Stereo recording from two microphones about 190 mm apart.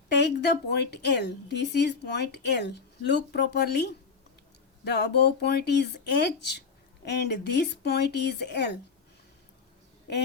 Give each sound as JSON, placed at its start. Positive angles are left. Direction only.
{"t": 0.1, "sound": "speech", "side_deg": 60}